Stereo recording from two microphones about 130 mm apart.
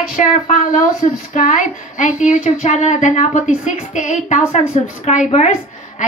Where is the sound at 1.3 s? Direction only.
85° left.